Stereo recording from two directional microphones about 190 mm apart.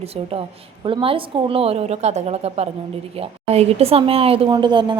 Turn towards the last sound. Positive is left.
turn(degrees=-25)  # may be behind; listen again after turning